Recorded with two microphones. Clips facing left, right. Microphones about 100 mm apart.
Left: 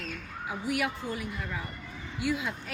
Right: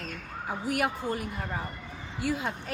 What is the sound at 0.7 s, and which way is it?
A woman's voice, 50° right (ahead or behind).